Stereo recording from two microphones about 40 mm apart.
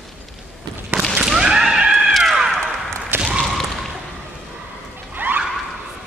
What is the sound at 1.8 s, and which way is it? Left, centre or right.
Cat, centre.